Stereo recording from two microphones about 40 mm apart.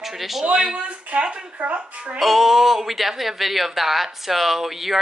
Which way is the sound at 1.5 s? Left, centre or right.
Right.